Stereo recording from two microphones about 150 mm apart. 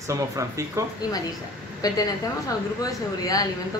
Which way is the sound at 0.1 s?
20° right (ahead or behind).